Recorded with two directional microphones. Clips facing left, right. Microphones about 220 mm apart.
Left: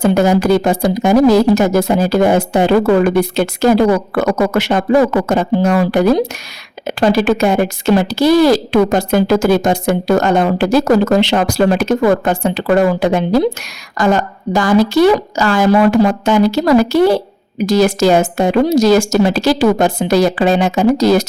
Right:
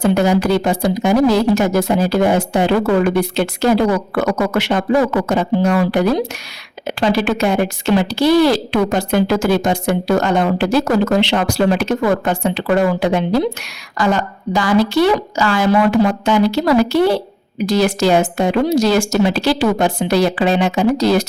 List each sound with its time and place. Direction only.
0.0 s a woman's voice: 45° left (ahead or behind)